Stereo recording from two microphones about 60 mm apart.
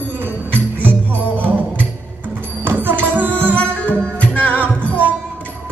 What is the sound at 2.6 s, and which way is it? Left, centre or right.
Music, right.